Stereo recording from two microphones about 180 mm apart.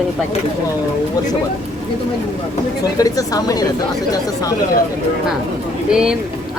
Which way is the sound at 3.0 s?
20° left (ahead or behind).